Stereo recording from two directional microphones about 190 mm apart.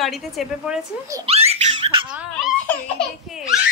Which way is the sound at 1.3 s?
35° right (ahead or behind).